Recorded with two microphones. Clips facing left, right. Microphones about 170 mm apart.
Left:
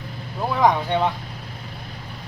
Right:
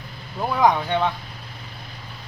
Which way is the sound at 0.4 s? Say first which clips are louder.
Even; centre (ahead or behind).